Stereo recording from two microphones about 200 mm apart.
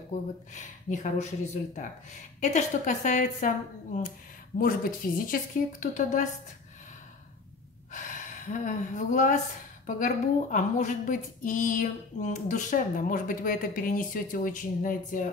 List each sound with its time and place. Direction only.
0.1 s speech: 40° left (ahead or behind)
7.9 s speech: 40° left (ahead or behind)